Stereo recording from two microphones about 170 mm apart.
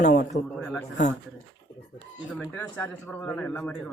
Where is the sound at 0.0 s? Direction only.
50° left (ahead or behind).